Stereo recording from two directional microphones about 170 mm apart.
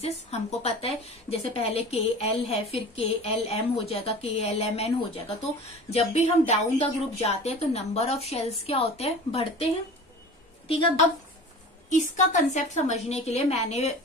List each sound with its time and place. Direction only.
0.0 s a woman's voice: 40° left (ahead or behind)
11.9 s a woman's voice: 45° left (ahead or behind)